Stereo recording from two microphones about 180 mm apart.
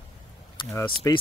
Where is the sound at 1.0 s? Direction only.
20° left (ahead or behind).